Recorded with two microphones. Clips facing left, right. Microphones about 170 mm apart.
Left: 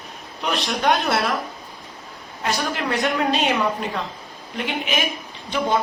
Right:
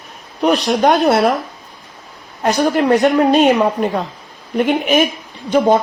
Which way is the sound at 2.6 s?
40° right (ahead or behind).